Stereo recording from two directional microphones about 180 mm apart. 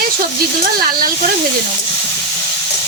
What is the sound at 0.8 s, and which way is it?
Speech, 55° right (ahead or behind).